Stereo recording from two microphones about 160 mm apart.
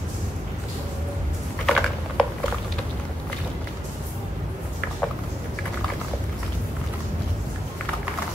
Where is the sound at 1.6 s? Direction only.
Centre (ahead or behind).